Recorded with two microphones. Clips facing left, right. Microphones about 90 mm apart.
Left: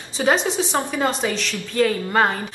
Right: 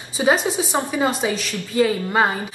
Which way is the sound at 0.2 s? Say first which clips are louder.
Right 1 dB; 10° right (ahead or behind).